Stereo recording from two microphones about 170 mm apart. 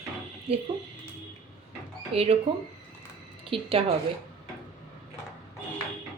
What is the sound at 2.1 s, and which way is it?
Speech, 35° right (ahead or behind).